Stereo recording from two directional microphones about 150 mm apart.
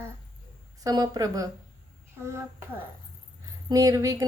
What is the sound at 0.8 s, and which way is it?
A child's voice, 25° right (ahead or behind).